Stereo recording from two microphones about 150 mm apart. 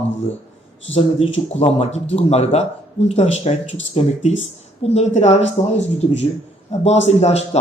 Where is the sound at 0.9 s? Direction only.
40° left (ahead or behind).